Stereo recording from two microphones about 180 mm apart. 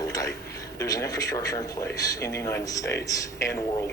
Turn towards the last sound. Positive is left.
turn(degrees=15)  # may be behind; listen again after turning